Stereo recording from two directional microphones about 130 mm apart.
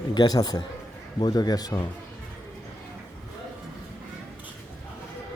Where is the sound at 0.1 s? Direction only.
30° left (ahead or behind).